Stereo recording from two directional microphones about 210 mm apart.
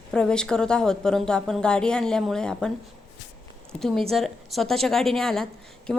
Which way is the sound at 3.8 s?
Centre (ahead or behind).